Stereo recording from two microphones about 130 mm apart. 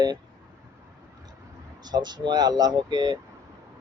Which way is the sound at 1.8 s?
35° right (ahead or behind).